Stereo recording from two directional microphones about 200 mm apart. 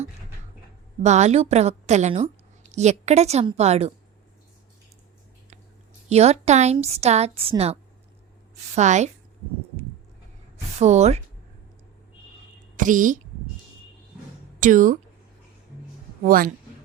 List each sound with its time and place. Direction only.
1.0 s a woman's voice: 35° right (ahead or behind)
6.1 s a woman's voice: 30° right (ahead or behind)
10.8 s a woman's voice: 35° right (ahead or behind)
12.7 s a woman's voice: 40° right (ahead or behind)
14.6 s a woman's voice: 40° right (ahead or behind)
16.2 s speech: 45° right (ahead or behind)